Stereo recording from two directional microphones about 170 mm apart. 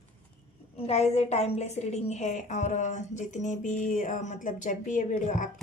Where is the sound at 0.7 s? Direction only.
35° left (ahead or behind).